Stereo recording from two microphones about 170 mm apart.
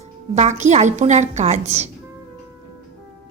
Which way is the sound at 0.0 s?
40° right (ahead or behind).